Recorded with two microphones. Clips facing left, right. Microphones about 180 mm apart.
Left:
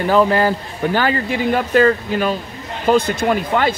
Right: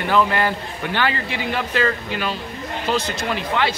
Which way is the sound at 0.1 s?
40° left (ahead or behind).